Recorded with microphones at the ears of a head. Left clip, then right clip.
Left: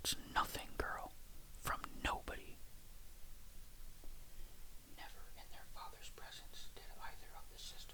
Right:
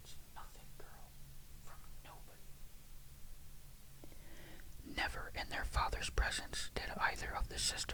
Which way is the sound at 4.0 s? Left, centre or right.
Right.